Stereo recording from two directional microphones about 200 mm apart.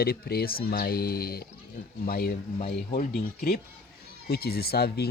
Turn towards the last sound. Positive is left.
turn(degrees=55)  # may be behind; listen again after turning